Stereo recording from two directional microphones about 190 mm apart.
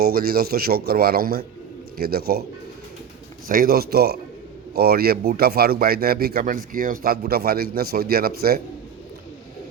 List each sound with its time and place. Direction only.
0.0 s a man's voice: 55° right (ahead or behind)
3.4 s speech: 50° right (ahead or behind)